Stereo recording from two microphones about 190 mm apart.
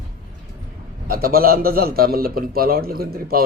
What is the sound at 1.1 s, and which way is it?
A man's voice, 50° right (ahead or behind).